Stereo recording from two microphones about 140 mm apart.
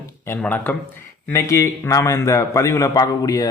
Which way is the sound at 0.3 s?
10° left (ahead or behind).